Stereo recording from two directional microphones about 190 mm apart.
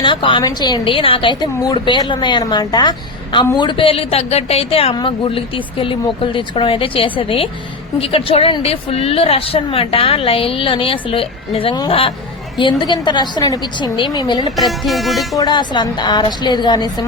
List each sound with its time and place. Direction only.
0.0 s a woman's voice: 25° left (ahead or behind)
14.5 s speech: centre (ahead or behind)
15.4 s a woman's voice: 25° left (ahead or behind)